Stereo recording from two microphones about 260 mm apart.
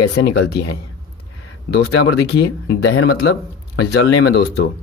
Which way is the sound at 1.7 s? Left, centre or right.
Left.